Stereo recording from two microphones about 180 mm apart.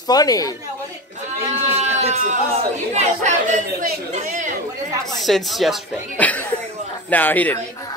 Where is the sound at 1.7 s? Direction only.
35° right (ahead or behind).